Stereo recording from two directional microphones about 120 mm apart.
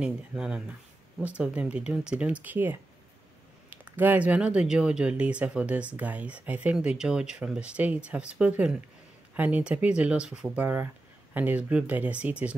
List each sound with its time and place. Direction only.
0.0 s speech: 10° right (ahead or behind)